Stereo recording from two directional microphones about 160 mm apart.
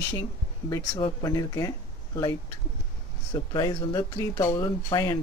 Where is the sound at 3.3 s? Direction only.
25° left (ahead or behind).